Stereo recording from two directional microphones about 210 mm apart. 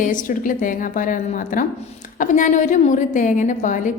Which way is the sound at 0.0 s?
40° left (ahead or behind).